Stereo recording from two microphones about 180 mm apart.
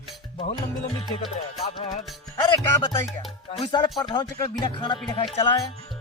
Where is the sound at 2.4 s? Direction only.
25° left (ahead or behind).